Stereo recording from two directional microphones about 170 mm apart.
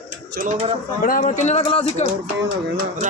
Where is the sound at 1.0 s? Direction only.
50° left (ahead or behind); by 2.0 s 35° left (ahead or behind).